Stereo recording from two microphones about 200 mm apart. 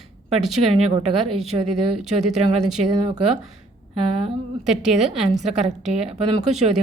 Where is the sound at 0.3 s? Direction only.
30° right (ahead or behind).